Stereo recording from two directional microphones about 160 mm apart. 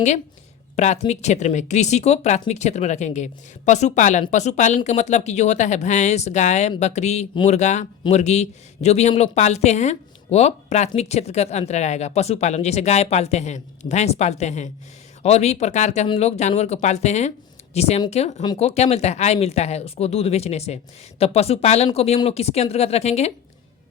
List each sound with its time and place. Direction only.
0.8 s speech: 45° left (ahead or behind)